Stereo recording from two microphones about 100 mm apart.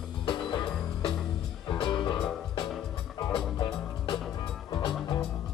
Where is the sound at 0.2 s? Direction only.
55° left (ahead or behind).